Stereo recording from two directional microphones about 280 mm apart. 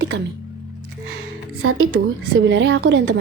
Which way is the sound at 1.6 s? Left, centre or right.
Right.